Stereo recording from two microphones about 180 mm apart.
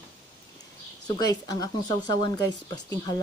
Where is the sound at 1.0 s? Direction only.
20° left (ahead or behind).